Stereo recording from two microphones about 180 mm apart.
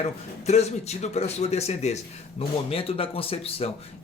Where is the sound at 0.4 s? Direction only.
35° left (ahead or behind).